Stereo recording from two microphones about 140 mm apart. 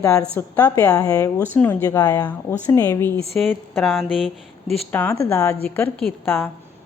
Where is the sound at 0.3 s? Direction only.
15° left (ahead or behind).